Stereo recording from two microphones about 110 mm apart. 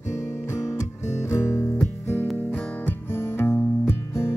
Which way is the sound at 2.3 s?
15° left (ahead or behind).